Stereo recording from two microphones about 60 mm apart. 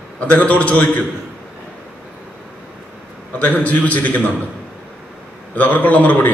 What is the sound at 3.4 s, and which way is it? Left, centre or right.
Speech, left.